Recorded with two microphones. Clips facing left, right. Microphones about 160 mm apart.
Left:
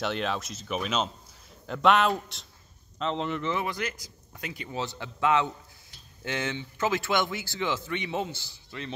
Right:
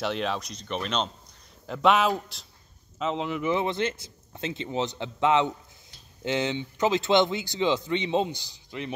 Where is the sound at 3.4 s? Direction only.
25° right (ahead or behind).